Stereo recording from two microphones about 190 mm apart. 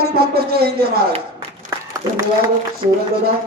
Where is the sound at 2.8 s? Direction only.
30° right (ahead or behind).